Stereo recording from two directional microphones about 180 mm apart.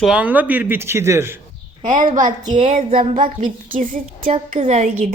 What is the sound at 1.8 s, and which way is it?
A woman's voice, 45° right (ahead or behind).